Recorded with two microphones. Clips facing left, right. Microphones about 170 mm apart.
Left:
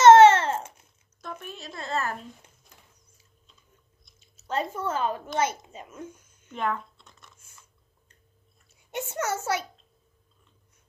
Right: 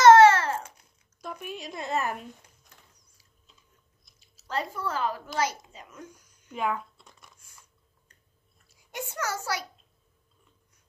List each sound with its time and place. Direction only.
0.0 s babbling: 25° left (ahead or behind)
1.2 s a woman's voice: 10° right (ahead or behind)
4.4 s a woman's voice: 25° left (ahead or behind)
6.5 s crumpling: 5° right (ahead or behind)
8.7 s a child's voice: 25° left (ahead or behind)